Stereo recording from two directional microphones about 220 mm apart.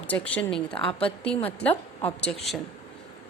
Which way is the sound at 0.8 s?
25° left (ahead or behind).